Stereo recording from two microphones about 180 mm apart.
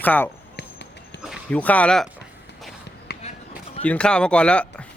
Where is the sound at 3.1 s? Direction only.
65° left (ahead or behind).